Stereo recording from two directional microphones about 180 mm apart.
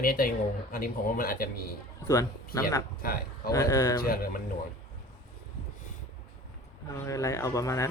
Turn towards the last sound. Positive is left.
turn(degrees=15)  # may be behind; listen again after turning